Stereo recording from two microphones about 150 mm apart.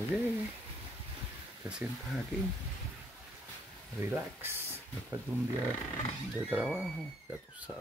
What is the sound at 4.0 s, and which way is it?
Speech, 15° right (ahead or behind).